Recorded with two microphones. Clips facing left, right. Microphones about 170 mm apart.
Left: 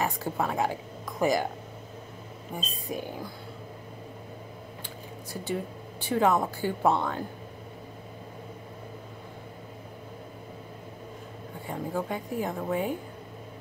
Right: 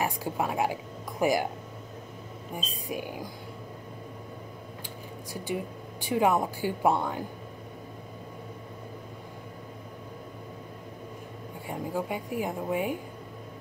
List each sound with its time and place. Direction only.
0.0 s a woman's voice: 10° right (ahead or behind)
2.5 s a woman's voice: 10° right (ahead or behind)
5.3 s a woman's voice: 10° right (ahead or behind)
11.6 s a woman's voice: 10° right (ahead or behind)